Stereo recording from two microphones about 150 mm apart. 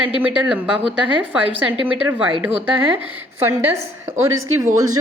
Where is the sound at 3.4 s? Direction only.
15° right (ahead or behind).